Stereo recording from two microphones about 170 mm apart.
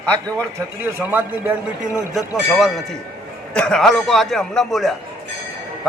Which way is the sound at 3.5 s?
5° left (ahead or behind).